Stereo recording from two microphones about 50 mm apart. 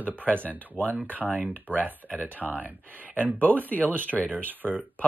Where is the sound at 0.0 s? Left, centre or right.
Right.